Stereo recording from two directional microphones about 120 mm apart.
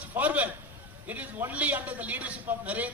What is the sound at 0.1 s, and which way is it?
A man's voice, 15° right (ahead or behind).